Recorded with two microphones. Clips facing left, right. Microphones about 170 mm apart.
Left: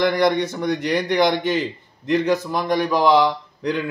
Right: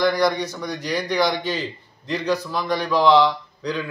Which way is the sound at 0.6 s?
55° left (ahead or behind).